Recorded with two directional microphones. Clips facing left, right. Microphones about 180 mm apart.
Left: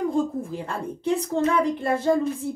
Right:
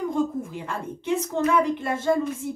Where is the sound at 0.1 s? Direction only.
35° left (ahead or behind).